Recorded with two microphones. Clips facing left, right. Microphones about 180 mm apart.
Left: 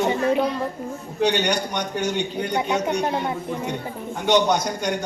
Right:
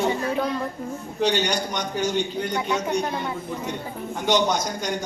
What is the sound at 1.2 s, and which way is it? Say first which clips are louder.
A man's voice: left 1 dB; 60° left (ahead or behind).